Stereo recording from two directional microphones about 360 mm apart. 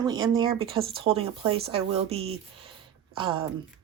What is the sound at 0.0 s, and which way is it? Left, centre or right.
Speech, centre.